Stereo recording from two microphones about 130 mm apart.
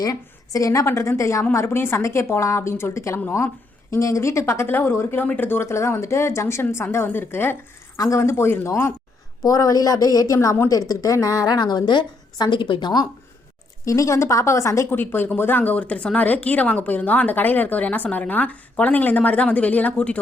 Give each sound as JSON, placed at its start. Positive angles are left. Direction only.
{"t": 0.0, "sound": "a woman's voice", "side_deg": 25}